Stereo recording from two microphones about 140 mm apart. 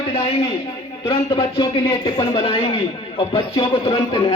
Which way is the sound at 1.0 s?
40° left (ahead or behind).